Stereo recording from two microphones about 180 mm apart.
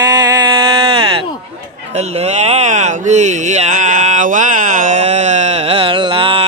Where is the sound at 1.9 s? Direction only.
40° right (ahead or behind).